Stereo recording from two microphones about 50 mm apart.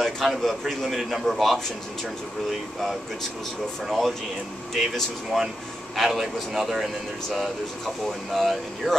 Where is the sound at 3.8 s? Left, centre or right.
Centre.